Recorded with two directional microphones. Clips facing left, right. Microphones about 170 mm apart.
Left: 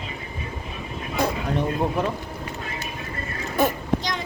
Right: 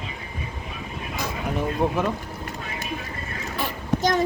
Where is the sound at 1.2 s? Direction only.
60° left (ahead or behind).